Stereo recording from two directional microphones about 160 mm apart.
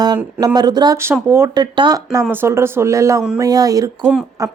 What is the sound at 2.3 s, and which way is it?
Speech, 15° right (ahead or behind).